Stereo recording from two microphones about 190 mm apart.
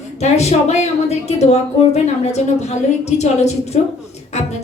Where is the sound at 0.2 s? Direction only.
35° left (ahead or behind).